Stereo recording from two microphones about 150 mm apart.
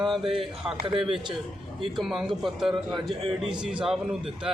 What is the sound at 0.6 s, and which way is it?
A man's voice, 10° right (ahead or behind).